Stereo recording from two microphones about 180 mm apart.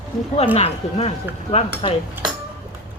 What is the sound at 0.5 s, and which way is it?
Speech, 35° left (ahead or behind).